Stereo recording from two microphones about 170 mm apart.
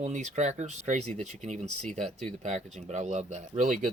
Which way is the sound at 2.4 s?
45° right (ahead or behind).